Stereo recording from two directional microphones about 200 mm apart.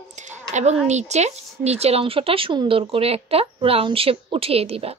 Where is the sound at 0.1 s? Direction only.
35° right (ahead or behind).